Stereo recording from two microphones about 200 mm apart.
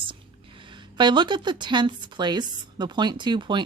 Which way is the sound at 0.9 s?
20° right (ahead or behind).